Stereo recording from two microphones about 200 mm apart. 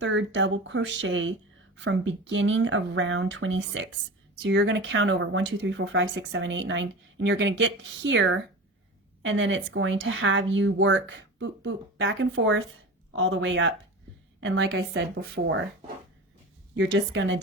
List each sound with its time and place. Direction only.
0.0 s a woman's voice: 65° right (ahead or behind)
16.7 s speech: 65° right (ahead or behind)